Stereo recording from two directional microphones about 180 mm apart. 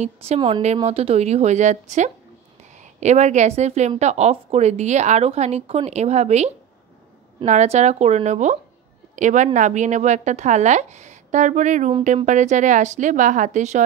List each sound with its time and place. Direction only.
0.0 s a woman's voice: 35° right (ahead or behind)